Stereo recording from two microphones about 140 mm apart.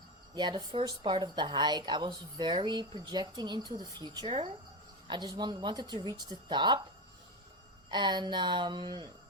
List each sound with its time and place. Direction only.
0.3 s a woman's voice: 35° right (ahead or behind)
7.9 s a woman's voice: 30° right (ahead or behind)